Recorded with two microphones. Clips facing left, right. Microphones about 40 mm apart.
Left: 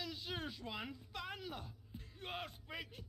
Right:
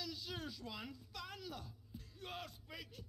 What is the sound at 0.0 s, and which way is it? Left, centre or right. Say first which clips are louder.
Speech: left 2 dB; left.